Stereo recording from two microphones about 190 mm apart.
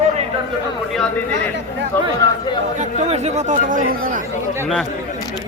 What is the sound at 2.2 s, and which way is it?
Speech, 15° left (ahead or behind).